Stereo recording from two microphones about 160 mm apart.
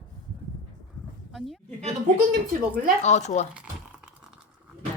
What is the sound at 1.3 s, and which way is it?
Speech, centre (ahead or behind).